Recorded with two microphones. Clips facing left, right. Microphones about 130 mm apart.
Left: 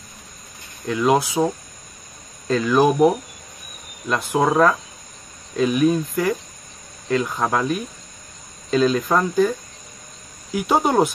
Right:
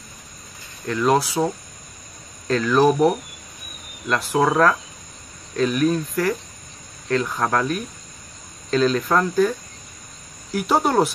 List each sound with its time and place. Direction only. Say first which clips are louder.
0.8 s speech: left 1 dB; 5° left (ahead or behind)
2.4 s speech: even; 5° left (ahead or behind)